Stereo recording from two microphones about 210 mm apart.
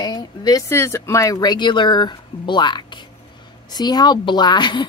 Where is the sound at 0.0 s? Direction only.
20° left (ahead or behind).